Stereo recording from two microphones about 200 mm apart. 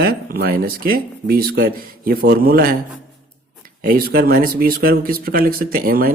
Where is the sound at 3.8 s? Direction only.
45° right (ahead or behind).